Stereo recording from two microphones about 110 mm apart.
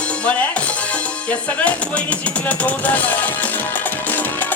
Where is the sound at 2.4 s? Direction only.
15° left (ahead or behind).